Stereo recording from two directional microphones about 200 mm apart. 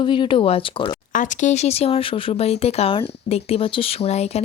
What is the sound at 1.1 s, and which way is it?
Speech, 40° left (ahead or behind).